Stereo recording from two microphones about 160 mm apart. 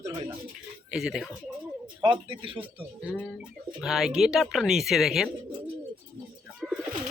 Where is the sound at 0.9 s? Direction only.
5° right (ahead or behind).